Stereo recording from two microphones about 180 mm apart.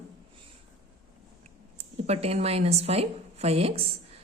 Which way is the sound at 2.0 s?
35° right (ahead or behind).